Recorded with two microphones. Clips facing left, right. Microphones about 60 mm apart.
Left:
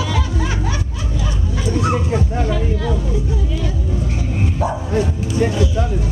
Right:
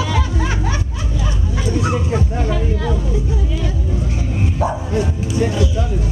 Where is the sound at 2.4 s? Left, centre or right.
Right.